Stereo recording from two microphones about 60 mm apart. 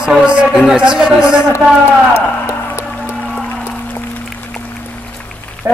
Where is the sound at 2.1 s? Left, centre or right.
Left.